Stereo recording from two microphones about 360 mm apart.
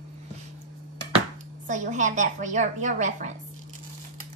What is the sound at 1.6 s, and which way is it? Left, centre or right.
A woman's voice, right.